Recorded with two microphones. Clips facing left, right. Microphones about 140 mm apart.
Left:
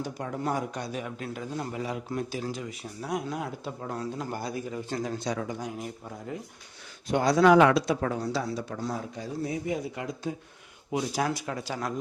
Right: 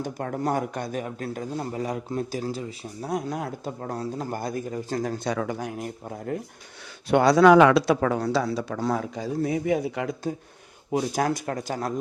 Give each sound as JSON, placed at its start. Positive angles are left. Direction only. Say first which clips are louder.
{"t": 0.0, "sound": "a man's voice", "louder": "right 4 dB", "side_deg": -50}
{"t": 5.4, "sound": "speech", "louder": "right 4 dB", "side_deg": -65}
{"t": 7.1, "sound": "speech", "louder": "right 4 dB", "side_deg": -75}
{"t": 10.9, "sound": "a man's voice", "louder": "right 4 dB", "side_deg": -45}